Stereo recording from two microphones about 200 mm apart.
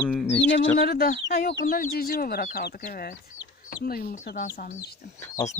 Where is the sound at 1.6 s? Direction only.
45° left (ahead or behind).